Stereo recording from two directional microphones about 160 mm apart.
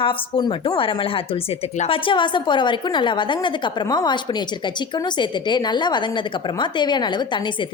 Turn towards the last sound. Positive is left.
turn(degrees=25)  # may be behind; listen again after turning